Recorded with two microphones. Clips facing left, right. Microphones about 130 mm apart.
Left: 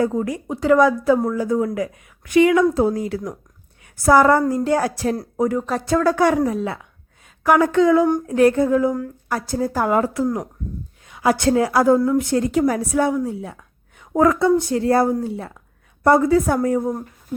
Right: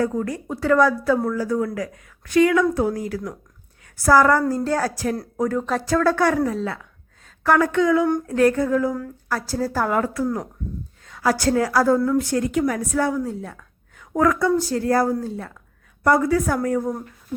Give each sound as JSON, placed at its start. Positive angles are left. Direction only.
{"t": 0.0, "sound": "a woman's voice", "side_deg": 20}
{"t": 5.5, "sound": "a woman's voice", "side_deg": 5}
{"t": 7.3, "sound": "a sound", "side_deg": 15}
{"t": 7.7, "sound": "a woman's voice", "side_deg": 30}